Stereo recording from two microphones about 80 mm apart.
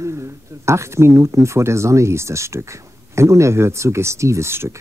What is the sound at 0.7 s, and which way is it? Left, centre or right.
Speech, right.